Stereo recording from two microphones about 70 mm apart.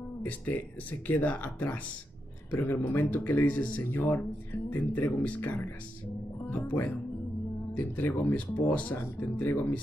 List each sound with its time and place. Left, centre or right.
0.2 s speech: left